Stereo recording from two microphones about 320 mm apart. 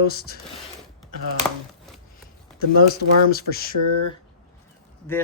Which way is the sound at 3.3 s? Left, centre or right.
Left.